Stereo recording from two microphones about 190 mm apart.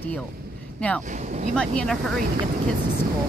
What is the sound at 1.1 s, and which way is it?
Speech, 40° right (ahead or behind).